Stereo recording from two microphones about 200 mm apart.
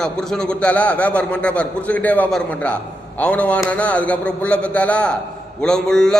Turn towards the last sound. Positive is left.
turn(degrees=5)  # may be behind; listen again after turning